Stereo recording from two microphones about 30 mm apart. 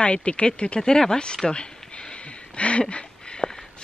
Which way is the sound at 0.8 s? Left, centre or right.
Left.